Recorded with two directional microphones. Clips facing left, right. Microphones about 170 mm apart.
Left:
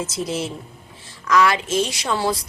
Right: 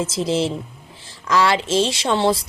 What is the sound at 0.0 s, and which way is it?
Speech, 25° right (ahead or behind).